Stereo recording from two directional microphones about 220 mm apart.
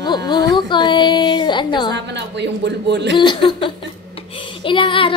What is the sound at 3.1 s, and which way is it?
A woman's voice, 20° left (ahead or behind).